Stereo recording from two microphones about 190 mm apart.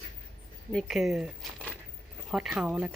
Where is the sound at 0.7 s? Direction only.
Centre (ahead or behind).